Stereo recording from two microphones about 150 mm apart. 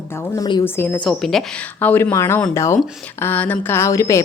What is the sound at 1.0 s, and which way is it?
A woman's voice, centre (ahead or behind).